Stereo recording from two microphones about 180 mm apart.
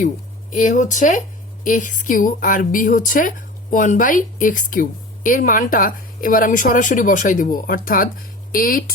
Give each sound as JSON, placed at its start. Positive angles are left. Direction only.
{"t": 0.5, "sound": "speech", "side_deg": 45}